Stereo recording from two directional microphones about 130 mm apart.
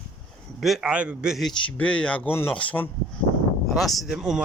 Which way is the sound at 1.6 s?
10° left (ahead or behind).